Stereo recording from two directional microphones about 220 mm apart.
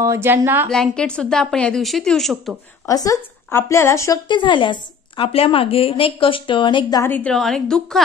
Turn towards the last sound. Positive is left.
turn(degrees=5)  # may be behind; listen again after turning